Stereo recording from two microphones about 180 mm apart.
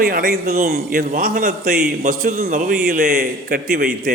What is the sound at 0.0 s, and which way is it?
A man's voice, 50° right (ahead or behind).